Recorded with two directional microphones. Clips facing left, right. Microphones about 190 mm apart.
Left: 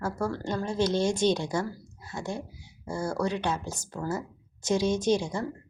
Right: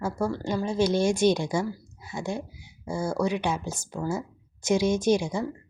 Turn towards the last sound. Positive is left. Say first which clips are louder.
# right 2 dB
turn(degrees=-10)  # may be behind; listen again after turning